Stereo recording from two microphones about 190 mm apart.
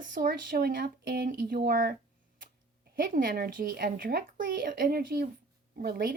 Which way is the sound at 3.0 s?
50° right (ahead or behind).